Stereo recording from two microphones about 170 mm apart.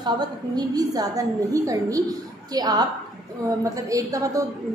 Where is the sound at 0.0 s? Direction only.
25° right (ahead or behind).